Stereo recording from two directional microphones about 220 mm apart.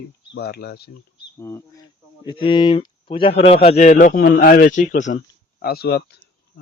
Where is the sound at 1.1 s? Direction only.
15° left (ahead or behind); by 5.1 s 35° left (ahead or behind).